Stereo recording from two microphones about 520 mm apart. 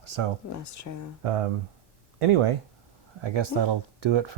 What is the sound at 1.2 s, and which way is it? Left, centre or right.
Speech, right.